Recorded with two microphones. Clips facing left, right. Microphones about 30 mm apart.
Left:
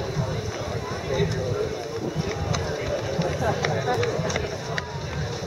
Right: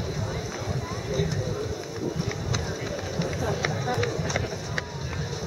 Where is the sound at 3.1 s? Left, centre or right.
Centre.